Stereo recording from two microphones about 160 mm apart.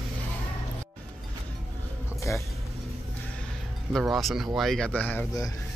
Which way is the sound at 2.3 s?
20° left (ahead or behind).